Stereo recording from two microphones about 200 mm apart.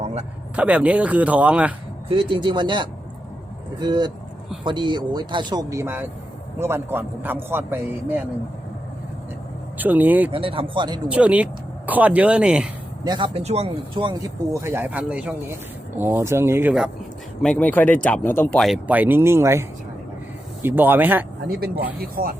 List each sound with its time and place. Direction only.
0.0 s a sound: 30° right (ahead or behind)
0.5 s a man's voice: 5° right (ahead or behind)
2.0 s a man's voice: 25° right (ahead or behind)
9.7 s a man's voice: 10° right (ahead or behind)
10.3 s speech: 25° right (ahead or behind)
11.1 s a man's voice: 5° right (ahead or behind)
13.1 s a man's voice: 25° right (ahead or behind); by 16.9 s 5° right (ahead or behind)
17.4 s a man's voice: 5° left (ahead or behind)
21.9 s speech: 45° right (ahead or behind)